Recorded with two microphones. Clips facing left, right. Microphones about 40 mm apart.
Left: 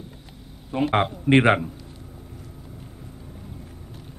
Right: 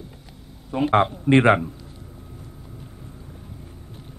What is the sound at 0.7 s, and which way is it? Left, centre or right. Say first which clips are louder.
Speech: right 3 dB; centre.